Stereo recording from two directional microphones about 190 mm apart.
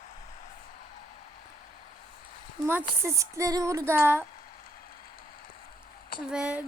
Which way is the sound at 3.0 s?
15° right (ahead or behind).